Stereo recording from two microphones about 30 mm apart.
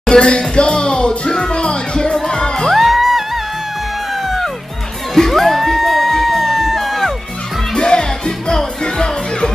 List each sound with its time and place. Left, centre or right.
0.1 s music: left
2.7 s music: centre
5.3 s music: centre
7.7 s music: left